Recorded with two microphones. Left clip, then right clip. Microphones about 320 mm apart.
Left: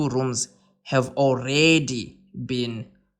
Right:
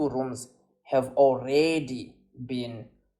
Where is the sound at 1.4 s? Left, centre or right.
Left.